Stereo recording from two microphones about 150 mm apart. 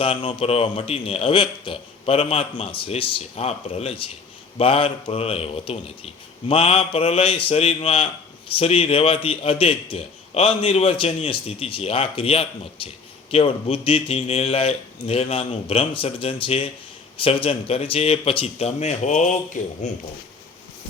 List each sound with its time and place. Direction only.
0.0 s a man's voice: 35° left (ahead or behind); by 20.0 s 50° left (ahead or behind)